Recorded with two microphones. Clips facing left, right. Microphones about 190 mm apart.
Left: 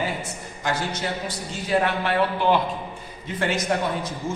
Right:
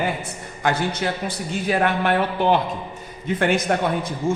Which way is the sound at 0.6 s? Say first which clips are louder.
Right 4 dB; 55° right (ahead or behind).